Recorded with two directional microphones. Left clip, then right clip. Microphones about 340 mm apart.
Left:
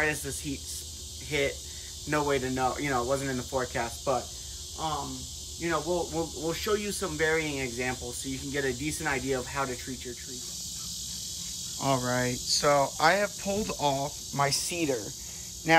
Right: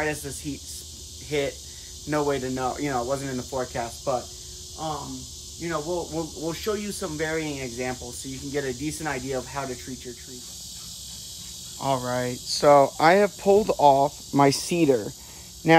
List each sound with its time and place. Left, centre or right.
0.0 s speech: centre
5.6 s speech: centre
11.8 s speech: centre; by 15.8 s right